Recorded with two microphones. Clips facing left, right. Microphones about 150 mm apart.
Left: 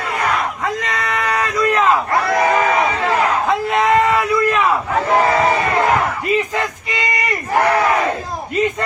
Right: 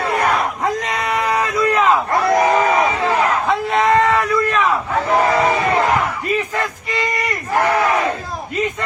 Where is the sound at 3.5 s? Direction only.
Centre (ahead or behind).